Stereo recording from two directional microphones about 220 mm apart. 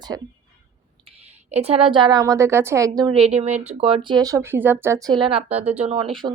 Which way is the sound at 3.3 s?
30° right (ahead or behind).